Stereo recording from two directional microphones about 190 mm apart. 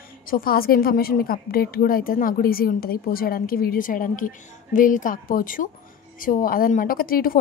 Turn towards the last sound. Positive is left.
turn(degrees=50)  # may be behind; listen again after turning